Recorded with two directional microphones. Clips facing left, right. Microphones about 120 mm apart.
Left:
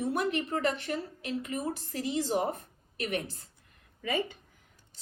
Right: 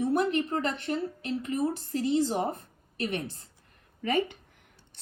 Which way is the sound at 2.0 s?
35° right (ahead or behind).